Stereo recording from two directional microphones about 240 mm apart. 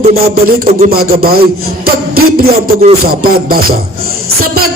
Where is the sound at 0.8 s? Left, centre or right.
Right.